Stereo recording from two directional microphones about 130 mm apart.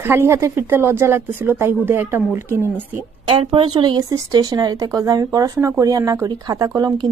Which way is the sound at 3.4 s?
45° right (ahead or behind).